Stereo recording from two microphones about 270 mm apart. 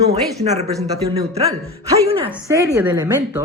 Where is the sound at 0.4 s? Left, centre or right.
Right.